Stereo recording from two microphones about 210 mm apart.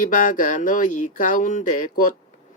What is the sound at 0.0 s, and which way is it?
Speech, 40° left (ahead or behind).